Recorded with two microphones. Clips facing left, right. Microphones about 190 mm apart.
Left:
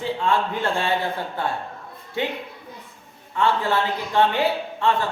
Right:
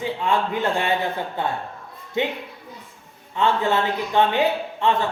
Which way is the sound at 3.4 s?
20° right (ahead or behind).